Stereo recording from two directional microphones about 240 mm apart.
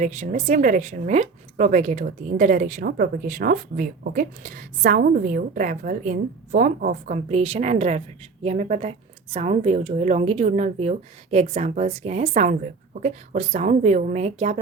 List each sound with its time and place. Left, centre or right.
0.0 s a woman's voice: right